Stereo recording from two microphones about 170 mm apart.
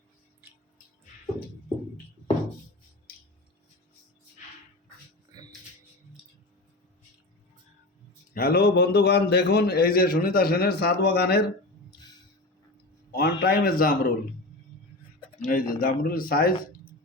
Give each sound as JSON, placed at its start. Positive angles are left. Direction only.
{"t": 5.3, "sound": "music", "side_deg": -25}
{"t": 8.3, "sound": "a man's voice", "side_deg": 60}
{"t": 13.1, "sound": "a man's voice", "side_deg": 65}
{"t": 15.4, "sound": "speech", "side_deg": 55}